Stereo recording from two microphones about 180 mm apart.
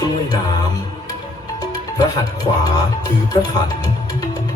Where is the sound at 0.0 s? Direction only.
20° left (ahead or behind).